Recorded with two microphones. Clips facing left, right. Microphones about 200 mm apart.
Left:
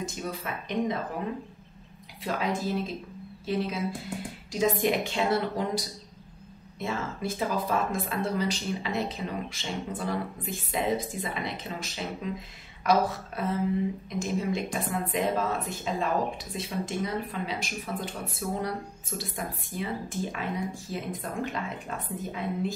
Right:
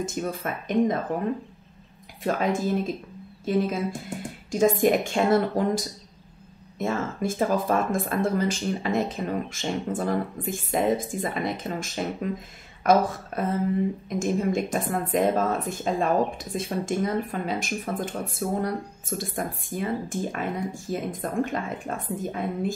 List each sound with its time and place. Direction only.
0.0 s speech: 50° right (ahead or behind)
2.3 s speech: 50° right (ahead or behind)
3.4 s speech: 50° right (ahead or behind)